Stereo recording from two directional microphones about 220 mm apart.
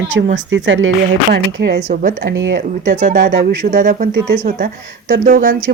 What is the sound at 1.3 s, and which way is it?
Speech, 50° right (ahead or behind).